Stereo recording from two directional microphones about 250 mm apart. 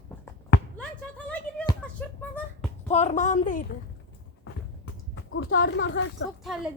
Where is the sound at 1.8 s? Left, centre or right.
Centre.